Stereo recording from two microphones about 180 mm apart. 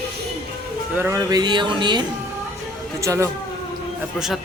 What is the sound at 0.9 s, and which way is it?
Speech, 15° right (ahead or behind).